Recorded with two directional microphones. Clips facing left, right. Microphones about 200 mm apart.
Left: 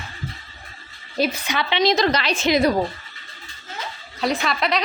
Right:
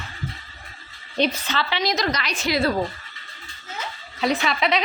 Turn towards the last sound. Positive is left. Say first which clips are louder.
# even
turn(degrees=0)  # may be behind; listen again after turning